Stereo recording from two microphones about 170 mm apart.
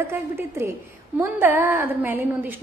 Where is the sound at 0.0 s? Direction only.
15° right (ahead or behind).